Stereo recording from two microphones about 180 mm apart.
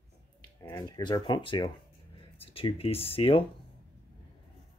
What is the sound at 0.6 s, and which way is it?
Speech, 20° left (ahead or behind).